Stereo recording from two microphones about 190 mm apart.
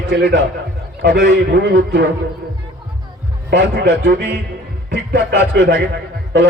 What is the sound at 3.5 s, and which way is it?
A man's voice, 55° right (ahead or behind).